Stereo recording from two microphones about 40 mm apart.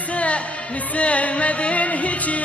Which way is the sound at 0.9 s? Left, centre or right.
Left.